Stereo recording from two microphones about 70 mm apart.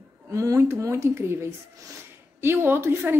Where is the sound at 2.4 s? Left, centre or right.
Right.